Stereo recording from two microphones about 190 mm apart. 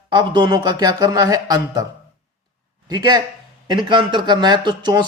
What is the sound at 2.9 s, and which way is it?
Speech, 20° right (ahead or behind).